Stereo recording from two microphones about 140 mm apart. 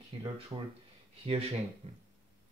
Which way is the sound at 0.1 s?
35° right (ahead or behind).